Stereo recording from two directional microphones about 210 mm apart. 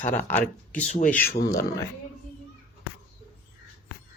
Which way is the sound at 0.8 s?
35° left (ahead or behind).